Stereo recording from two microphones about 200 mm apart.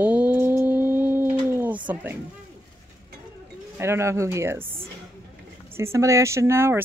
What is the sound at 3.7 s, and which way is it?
Speech, 10° right (ahead or behind).